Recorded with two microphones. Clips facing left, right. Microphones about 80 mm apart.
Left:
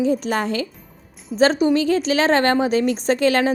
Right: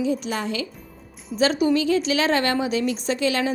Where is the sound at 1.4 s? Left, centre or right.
Left.